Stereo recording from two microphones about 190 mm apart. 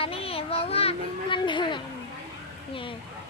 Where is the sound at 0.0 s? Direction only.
30° left (ahead or behind).